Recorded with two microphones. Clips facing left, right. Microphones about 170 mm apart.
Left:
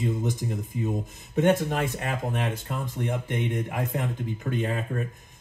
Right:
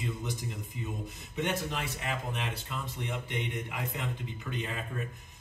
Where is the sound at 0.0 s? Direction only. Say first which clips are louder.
Left 9 dB; 45° left (ahead or behind).